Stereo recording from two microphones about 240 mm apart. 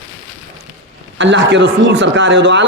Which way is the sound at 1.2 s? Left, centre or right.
Right.